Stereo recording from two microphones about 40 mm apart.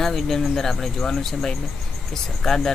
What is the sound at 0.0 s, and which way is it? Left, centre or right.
Speech, centre.